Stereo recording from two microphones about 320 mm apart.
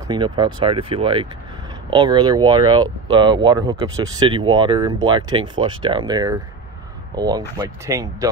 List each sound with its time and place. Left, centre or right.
0.1 s speech: centre